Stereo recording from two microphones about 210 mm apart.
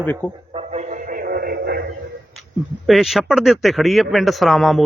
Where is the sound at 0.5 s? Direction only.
35° right (ahead or behind); by 1.9 s 50° right (ahead or behind).